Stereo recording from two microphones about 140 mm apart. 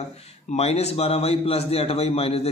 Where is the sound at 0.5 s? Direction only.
50° left (ahead or behind).